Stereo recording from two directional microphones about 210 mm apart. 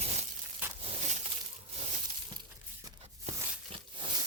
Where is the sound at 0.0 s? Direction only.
30° right (ahead or behind).